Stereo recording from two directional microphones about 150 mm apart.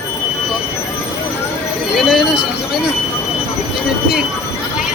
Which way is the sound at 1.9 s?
Centre (ahead or behind).